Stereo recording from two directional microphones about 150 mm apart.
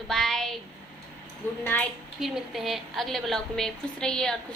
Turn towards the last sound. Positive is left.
turn(degrees=5)  # may be behind; listen again after turning